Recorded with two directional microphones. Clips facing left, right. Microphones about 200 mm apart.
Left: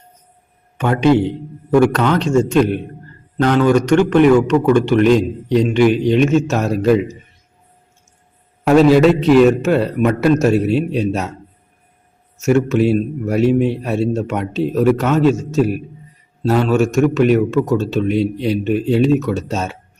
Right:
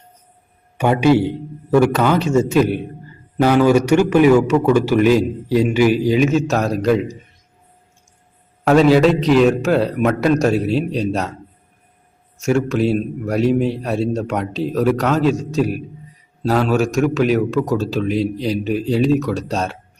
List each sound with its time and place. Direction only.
0.8 s a man's voice: 10° right (ahead or behind)
8.6 s a man's voice: centre (ahead or behind)
12.4 s a man's voice: centre (ahead or behind)